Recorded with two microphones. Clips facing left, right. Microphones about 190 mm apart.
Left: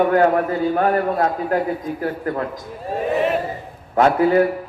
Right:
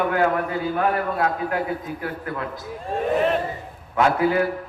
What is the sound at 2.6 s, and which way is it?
Speech, 5° left (ahead or behind).